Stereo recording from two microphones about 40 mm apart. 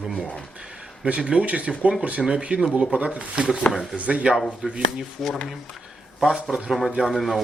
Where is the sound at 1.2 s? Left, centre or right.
Right.